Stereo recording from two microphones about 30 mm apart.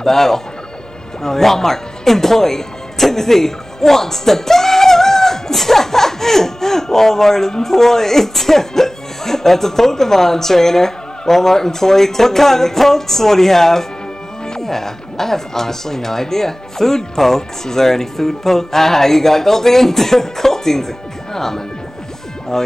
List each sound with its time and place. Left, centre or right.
0.0 s speech: centre